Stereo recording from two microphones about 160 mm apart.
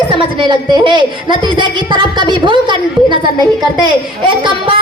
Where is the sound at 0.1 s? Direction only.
30° right (ahead or behind).